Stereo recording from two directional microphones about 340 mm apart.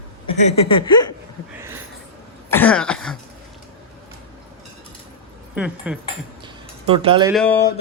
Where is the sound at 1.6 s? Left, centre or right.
Centre.